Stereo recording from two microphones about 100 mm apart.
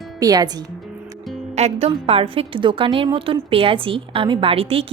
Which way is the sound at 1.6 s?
90° right.